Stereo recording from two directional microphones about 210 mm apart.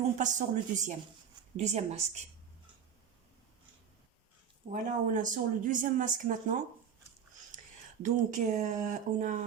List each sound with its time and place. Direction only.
0.2 s speech: 35° right (ahead or behind)
4.7 s speech: 40° right (ahead or behind)
8.0 s speech: 35° right (ahead or behind)